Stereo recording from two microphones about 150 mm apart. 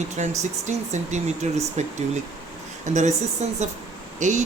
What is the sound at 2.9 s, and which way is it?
Speech, 50° right (ahead or behind).